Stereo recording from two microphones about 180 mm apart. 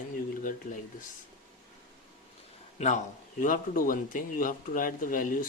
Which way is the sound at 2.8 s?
40° left (ahead or behind).